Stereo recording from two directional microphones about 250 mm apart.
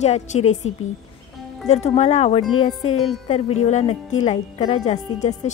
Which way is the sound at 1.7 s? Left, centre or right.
Left.